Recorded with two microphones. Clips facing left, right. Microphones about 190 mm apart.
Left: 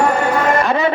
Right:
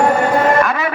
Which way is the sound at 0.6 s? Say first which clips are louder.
Left 4 dB; 30° left (ahead or behind).